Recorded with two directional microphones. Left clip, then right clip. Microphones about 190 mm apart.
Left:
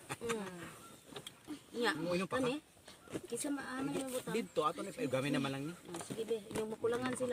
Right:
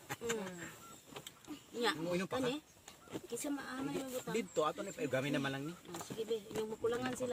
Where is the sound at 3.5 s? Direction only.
Centre (ahead or behind).